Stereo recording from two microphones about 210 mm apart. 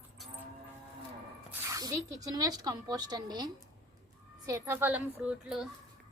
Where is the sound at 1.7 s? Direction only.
15° right (ahead or behind).